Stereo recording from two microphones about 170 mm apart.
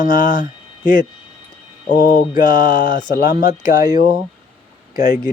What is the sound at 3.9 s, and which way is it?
Speech, 55° left (ahead or behind).